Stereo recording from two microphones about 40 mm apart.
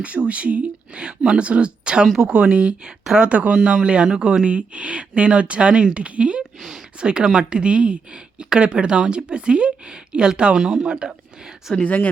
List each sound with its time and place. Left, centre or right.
0.2 s speech: right
6.6 s speech: centre
7.0 s speech: right